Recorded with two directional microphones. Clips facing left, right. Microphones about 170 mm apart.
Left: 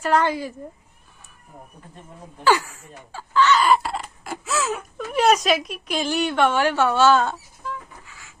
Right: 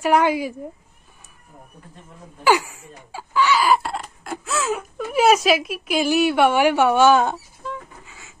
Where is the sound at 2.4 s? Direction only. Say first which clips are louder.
Right 1 dB; 15° right (ahead or behind).